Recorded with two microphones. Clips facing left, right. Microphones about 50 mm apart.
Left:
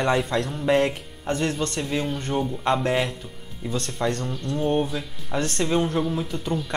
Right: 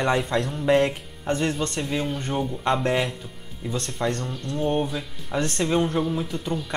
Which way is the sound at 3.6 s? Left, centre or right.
Centre.